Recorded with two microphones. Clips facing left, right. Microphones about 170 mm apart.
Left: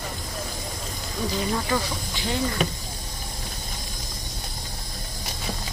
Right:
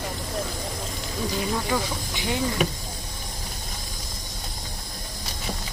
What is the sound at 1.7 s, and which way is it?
Speech, 10° right (ahead or behind).